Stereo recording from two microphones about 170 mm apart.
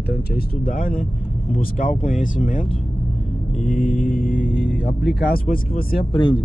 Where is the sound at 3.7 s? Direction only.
50° left (ahead or behind).